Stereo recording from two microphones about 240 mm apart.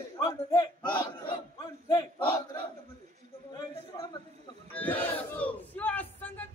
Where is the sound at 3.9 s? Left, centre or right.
Centre.